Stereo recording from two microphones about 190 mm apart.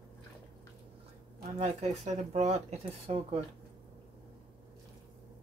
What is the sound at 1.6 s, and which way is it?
Speech, 35° right (ahead or behind).